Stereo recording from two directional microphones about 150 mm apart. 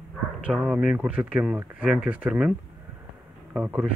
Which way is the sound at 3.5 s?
10° right (ahead or behind).